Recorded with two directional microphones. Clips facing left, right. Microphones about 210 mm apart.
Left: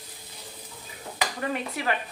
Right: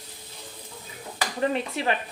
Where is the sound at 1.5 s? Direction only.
25° right (ahead or behind).